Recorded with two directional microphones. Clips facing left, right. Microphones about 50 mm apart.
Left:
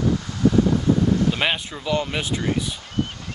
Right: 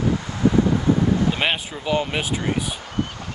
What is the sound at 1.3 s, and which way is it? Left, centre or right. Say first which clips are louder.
Speech: even; centre.